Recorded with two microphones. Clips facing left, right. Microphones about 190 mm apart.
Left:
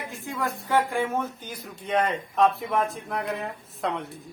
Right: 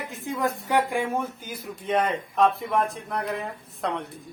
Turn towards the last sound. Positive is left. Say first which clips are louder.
# even
turn(degrees=0)  # may be behind; listen again after turning